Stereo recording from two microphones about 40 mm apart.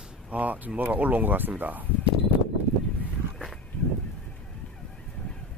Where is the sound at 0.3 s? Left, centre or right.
Right.